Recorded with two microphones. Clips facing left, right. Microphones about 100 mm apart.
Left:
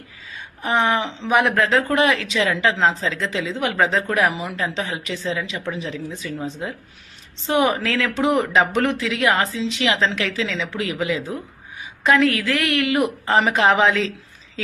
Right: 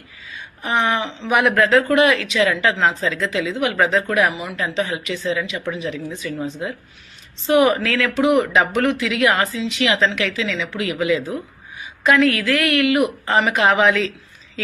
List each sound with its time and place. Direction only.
0.6 s speech: 25° left (ahead or behind)